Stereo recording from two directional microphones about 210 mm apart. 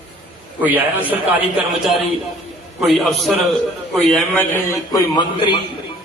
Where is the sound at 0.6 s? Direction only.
10° right (ahead or behind).